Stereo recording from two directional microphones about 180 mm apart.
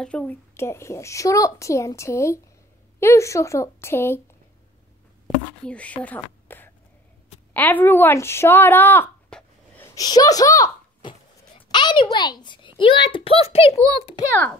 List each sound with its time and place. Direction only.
0.0 s a woman's voice: 5° left (ahead or behind)
5.7 s a woman's voice: 5° left (ahead or behind); by 13.7 s 30° left (ahead or behind)
13.7 s a child's voice: 20° right (ahead or behind)